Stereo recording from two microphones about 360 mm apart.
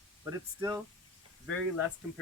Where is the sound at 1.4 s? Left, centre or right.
Left.